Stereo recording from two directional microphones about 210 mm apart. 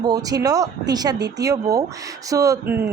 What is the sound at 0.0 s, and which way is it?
Speech, 20° right (ahead or behind).